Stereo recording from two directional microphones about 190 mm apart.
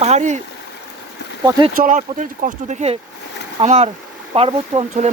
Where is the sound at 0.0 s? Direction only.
35° right (ahead or behind).